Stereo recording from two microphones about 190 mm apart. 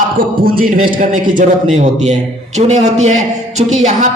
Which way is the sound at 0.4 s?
50° right (ahead or behind).